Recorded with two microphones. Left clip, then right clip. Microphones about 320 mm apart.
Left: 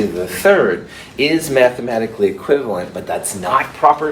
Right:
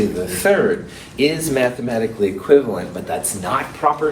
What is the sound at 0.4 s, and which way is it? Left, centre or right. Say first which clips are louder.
A man's voice: left 4 dB; left.